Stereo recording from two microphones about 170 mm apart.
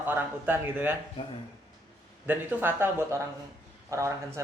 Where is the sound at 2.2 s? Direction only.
10° right (ahead or behind).